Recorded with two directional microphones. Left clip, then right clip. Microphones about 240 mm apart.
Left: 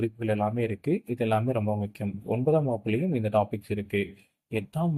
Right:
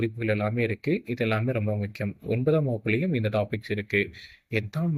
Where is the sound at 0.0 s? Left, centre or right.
Right.